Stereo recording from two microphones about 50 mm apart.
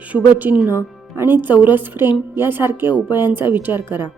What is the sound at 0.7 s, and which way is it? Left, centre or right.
A woman's voice, right.